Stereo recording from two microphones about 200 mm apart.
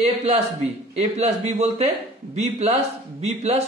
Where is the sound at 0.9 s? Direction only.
35° right (ahead or behind).